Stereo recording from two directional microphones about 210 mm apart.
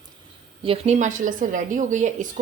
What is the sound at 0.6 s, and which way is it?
A woman's voice, 30° right (ahead or behind).